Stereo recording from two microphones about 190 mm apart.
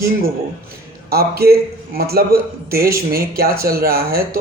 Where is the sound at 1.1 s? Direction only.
55° right (ahead or behind).